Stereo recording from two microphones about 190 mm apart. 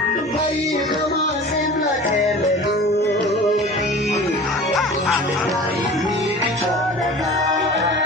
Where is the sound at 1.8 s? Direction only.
40° left (ahead or behind).